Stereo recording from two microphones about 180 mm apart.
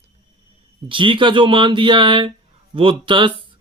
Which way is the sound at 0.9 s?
30° right (ahead or behind).